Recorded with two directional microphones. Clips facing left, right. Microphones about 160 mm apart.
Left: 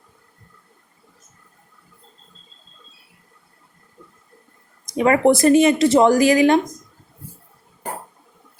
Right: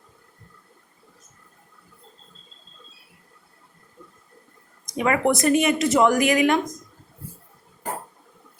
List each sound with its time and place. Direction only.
4.9 s speech: 35° left (ahead or behind)